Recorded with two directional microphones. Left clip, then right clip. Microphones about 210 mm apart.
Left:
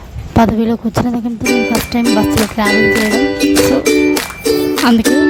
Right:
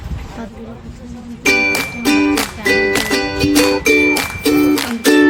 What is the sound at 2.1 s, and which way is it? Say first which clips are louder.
Music: even; 5° left (ahead or behind).